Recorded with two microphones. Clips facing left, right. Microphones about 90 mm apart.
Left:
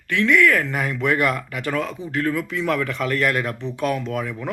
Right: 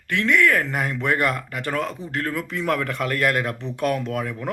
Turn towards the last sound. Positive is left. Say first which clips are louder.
# even
turn(degrees=-50)  # may be behind; listen again after turning